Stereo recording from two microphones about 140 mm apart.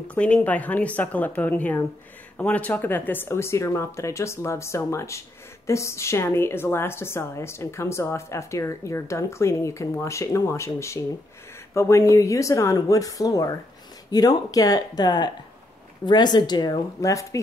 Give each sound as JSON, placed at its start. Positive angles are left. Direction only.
{"t": 0.1, "sound": "a woman's voice", "side_deg": 10}